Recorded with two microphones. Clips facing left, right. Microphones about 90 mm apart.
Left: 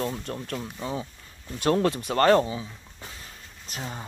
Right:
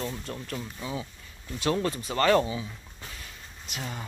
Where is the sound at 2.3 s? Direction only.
30° left (ahead or behind).